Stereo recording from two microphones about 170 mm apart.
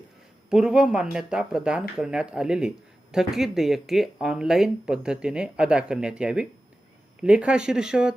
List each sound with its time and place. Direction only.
0.5 s speech: 5° right (ahead or behind)